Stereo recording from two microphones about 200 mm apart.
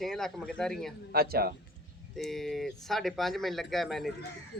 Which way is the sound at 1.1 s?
50° right (ahead or behind).